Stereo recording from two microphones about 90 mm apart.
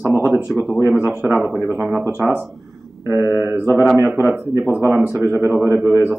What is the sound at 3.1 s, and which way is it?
A man's voice, 30° right (ahead or behind).